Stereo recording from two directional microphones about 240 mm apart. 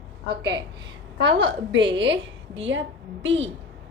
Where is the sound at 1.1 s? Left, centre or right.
Right.